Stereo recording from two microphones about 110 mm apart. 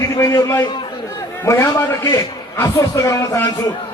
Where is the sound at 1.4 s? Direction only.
25° left (ahead or behind).